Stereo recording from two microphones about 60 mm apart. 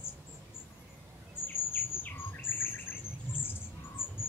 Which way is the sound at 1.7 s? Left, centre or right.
Left.